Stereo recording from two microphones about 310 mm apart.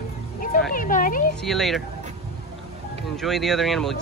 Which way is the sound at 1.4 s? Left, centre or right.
Centre.